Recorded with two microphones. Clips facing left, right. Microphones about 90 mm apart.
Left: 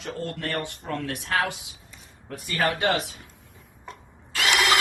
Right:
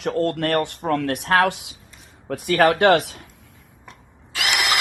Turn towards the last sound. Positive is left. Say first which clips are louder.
# left 1 dB
turn(degrees=-10)  # may be behind; listen again after turning